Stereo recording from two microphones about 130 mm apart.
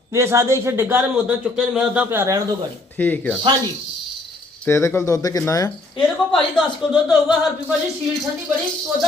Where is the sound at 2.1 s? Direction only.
20° right (ahead or behind).